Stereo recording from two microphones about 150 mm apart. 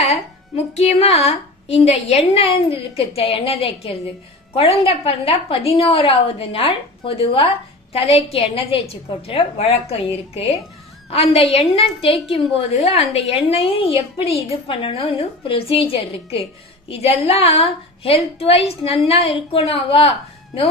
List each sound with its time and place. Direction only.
0.1 s a woman's voice: 45° left (ahead or behind)
11.1 s a woman's voice: 45° left (ahead or behind)